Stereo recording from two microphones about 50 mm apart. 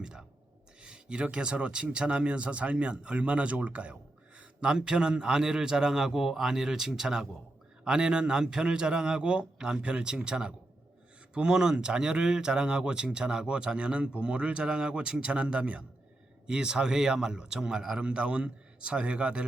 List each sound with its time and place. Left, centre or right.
0.0 s a sound: centre
0.8 s speech: centre
4.4 s speech: centre